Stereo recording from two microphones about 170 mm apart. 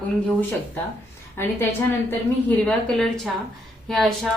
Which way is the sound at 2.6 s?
5° left (ahead or behind).